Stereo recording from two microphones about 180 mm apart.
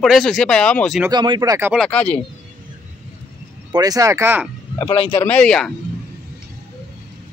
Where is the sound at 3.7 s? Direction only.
20° right (ahead or behind).